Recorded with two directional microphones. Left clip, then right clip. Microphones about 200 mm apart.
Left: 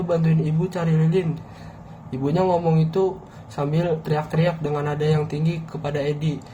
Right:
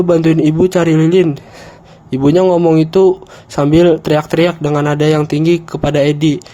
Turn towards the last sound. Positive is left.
turn(degrees=-55)  # may be behind; listen again after turning